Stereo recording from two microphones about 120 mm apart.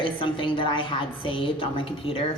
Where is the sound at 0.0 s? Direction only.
45° left (ahead or behind).